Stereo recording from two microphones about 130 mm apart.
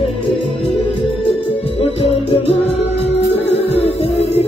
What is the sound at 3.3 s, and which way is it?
Music, 50° left (ahead or behind).